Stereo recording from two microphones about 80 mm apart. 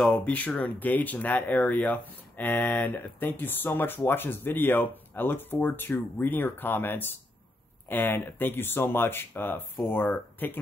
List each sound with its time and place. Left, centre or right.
0.1 s speech: centre